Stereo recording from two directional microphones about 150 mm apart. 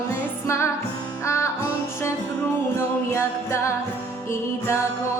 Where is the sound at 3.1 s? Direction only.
20° left (ahead or behind).